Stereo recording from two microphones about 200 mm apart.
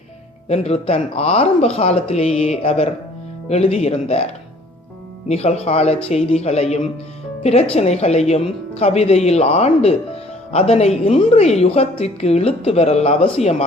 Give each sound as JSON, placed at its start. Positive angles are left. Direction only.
{"t": 0.4, "sound": "a woman's voice", "side_deg": 30}
{"t": 5.3, "sound": "a woman's voice", "side_deg": 30}